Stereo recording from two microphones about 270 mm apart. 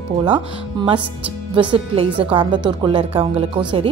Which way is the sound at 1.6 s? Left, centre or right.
Centre.